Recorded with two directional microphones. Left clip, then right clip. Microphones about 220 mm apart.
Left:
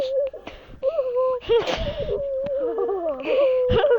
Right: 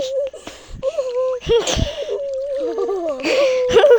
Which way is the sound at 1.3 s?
35° right (ahead or behind).